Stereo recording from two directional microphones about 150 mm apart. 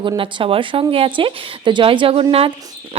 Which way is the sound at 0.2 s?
35° right (ahead or behind).